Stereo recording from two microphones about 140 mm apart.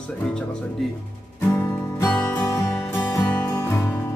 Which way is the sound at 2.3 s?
15° left (ahead or behind).